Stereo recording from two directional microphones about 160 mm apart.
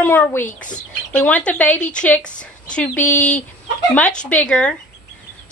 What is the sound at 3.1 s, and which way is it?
Speech, 50° left (ahead or behind).